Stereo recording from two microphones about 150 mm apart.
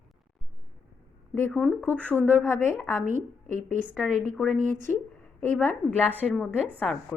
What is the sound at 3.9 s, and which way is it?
Speech, centre (ahead or behind).